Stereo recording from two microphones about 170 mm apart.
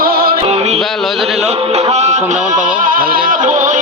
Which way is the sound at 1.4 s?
35° right (ahead or behind).